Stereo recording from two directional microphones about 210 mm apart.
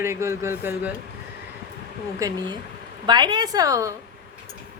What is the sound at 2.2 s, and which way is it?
Speech, 20° right (ahead or behind).